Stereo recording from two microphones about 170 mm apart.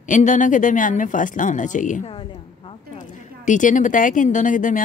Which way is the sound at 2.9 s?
50° left (ahead or behind).